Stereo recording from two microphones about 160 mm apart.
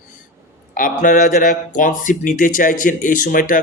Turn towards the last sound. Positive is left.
turn(degrees=55)  # may be behind; listen again after turning